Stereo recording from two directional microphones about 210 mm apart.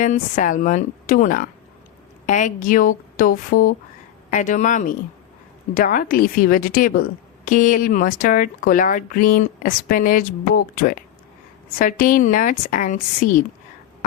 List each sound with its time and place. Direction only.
0.0 s speech: 35° left (ahead or behind)